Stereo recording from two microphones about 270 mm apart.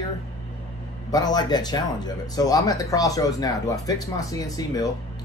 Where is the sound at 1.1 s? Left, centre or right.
Centre.